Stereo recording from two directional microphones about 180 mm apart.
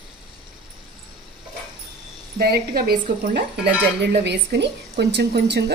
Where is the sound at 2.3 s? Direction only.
60° right (ahead or behind).